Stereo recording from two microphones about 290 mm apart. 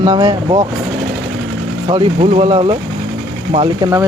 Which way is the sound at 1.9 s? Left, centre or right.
Centre.